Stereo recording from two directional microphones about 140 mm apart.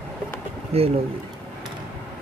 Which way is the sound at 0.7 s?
45° right (ahead or behind).